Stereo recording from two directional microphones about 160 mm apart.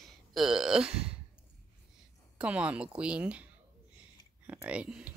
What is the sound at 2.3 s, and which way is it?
Speech, 5° right (ahead or behind).